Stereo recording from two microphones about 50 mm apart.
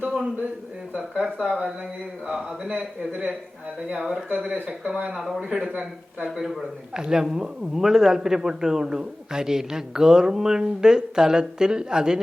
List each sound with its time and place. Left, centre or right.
0.9 s a man's voice: centre
2.3 s a man's voice: right
3.9 s a man's voice: centre
4.4 s a man's voice: right
5.1 s a man's voice: centre
6.2 s a man's voice: centre